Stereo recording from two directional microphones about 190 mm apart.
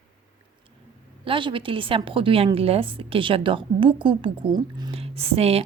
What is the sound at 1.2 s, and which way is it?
A woman's voice, 25° right (ahead or behind).